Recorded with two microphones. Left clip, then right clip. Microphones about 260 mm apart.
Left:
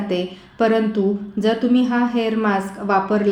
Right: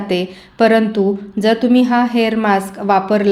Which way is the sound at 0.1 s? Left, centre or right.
Right.